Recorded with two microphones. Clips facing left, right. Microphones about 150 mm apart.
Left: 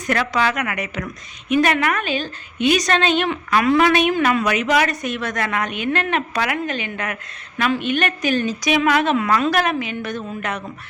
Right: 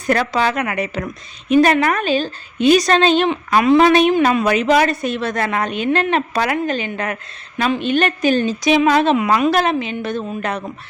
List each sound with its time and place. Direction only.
0.1 s a woman's voice: 35° right (ahead or behind)
3.2 s a woman's voice: 20° right (ahead or behind)
9.1 s a woman's voice: 20° right (ahead or behind)